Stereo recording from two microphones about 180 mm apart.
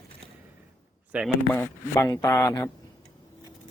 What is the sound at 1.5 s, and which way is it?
A man's voice, 15° left (ahead or behind).